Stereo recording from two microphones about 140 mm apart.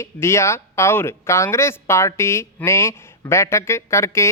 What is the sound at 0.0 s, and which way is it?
Speech, 20° left (ahead or behind).